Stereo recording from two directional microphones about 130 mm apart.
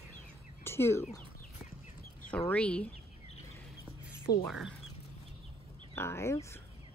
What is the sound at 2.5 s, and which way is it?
Speech, 10° left (ahead or behind).